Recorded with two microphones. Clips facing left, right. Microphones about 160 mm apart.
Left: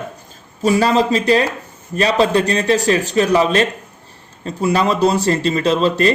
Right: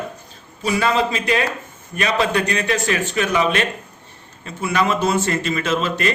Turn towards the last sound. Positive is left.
turn(degrees=35)  # may be behind; listen again after turning